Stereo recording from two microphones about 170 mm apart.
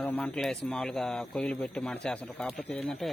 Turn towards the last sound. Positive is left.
turn(degrees=5)  # may be behind; listen again after turning